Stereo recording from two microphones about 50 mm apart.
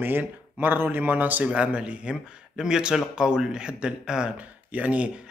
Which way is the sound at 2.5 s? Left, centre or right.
Centre.